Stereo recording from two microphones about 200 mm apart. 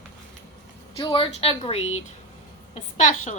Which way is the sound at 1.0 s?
25° left (ahead or behind).